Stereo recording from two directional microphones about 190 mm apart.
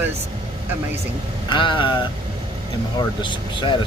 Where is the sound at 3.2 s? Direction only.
25° left (ahead or behind).